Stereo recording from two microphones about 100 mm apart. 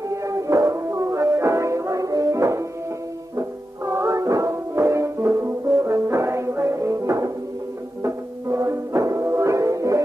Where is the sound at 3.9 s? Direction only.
35° right (ahead or behind).